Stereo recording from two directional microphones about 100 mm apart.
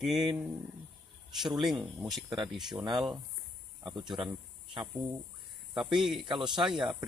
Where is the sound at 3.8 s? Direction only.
50° right (ahead or behind).